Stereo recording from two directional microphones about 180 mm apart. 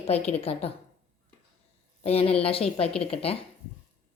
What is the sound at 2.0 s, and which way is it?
Speech, 35° left (ahead or behind).